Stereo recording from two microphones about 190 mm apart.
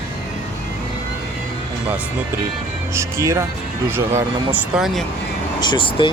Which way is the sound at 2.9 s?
15° right (ahead or behind).